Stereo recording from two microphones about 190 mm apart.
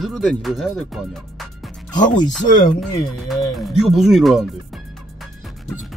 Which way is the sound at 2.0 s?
40° left (ahead or behind).